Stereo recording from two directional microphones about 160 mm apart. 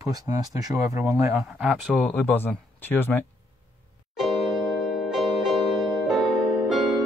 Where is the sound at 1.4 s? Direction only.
5° right (ahead or behind).